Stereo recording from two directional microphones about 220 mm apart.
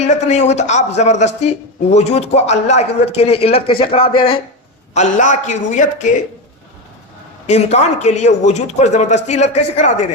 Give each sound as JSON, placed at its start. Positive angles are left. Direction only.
{"t": 0.0, "sound": "a man's voice", "side_deg": 30}
{"t": 4.9, "sound": "a man's voice", "side_deg": 35}
{"t": 7.4, "sound": "a man's voice", "side_deg": 30}